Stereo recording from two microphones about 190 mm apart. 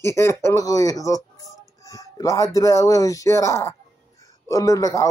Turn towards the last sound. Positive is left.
turn(degrees=15)  # may be behind; listen again after turning